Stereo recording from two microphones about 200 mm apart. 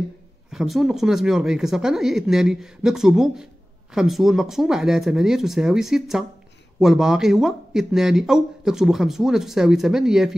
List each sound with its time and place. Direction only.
0.5 s speech: centre (ahead or behind)